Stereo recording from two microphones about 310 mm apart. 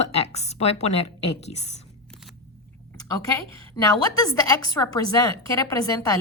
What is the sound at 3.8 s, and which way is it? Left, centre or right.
A woman's voice, centre.